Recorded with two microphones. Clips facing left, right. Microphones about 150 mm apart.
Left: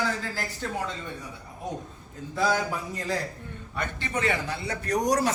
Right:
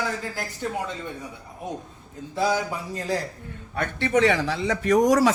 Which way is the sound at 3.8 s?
70° right (ahead or behind).